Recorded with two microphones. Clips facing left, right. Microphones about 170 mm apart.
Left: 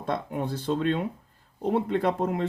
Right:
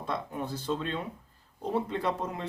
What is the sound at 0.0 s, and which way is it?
Speech, 55° left (ahead or behind).